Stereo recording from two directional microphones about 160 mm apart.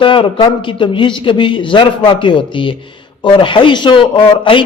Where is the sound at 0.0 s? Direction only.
30° left (ahead or behind).